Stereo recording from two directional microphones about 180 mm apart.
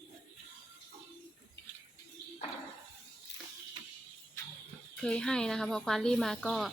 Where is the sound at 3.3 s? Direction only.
80° left.